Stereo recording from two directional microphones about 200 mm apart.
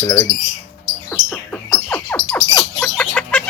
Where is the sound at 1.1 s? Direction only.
5° left (ahead or behind).